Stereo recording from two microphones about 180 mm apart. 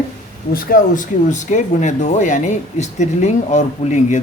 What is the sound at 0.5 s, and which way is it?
Speech, 50° left (ahead or behind).